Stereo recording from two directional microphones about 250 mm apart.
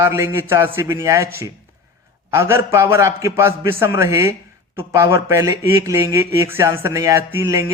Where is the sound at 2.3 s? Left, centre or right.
Centre.